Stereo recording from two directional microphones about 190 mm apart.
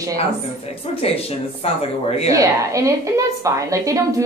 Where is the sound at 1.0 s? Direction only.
30° left (ahead or behind).